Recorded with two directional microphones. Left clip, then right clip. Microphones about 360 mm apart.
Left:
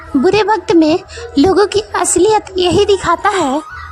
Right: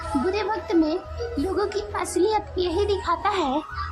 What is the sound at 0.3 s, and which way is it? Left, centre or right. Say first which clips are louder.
A woman's voice: left 16 dB; centre.